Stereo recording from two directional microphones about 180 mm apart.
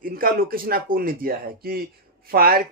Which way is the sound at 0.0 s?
55° right (ahead or behind).